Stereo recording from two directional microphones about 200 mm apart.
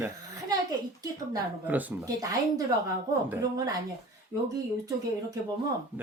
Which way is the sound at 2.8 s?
15° right (ahead or behind).